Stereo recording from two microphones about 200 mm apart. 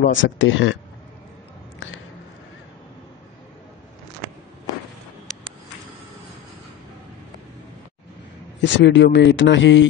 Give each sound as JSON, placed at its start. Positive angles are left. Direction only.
{"t": 0.1, "sound": "speech", "side_deg": 70}
{"t": 8.5, "sound": "speech", "side_deg": 60}